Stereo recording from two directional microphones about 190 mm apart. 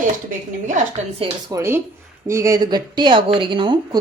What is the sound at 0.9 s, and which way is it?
Speech, 30° right (ahead or behind).